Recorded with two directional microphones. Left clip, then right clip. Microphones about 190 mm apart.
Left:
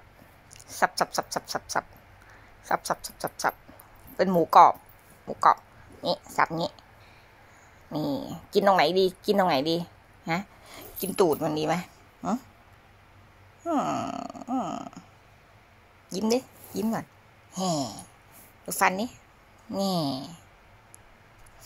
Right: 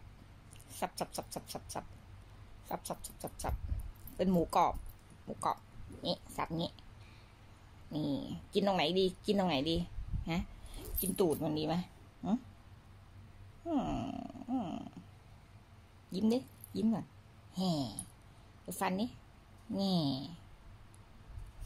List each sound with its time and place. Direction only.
0.5 s speech: 15° left (ahead or behind)
6.0 s speech: 15° left (ahead or behind)
7.9 s speech: 20° left (ahead or behind)
11.6 s a sound: 15° left (ahead or behind)
13.7 s speech: 5° left (ahead or behind)
16.1 s speech: 45° left (ahead or behind)
18.8 s speech: 15° left (ahead or behind)